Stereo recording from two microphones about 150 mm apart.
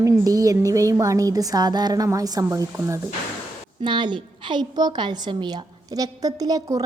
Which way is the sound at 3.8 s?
30° right (ahead or behind).